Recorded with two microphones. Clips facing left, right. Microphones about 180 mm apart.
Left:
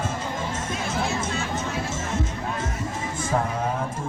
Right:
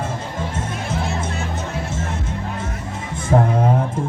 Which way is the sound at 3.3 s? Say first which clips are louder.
Right 8 dB; 35° right (ahead or behind).